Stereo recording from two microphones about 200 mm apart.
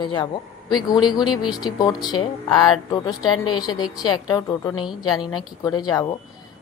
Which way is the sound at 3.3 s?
90° left.